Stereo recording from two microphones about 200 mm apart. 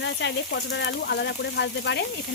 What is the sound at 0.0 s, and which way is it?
Speech, 60° left (ahead or behind).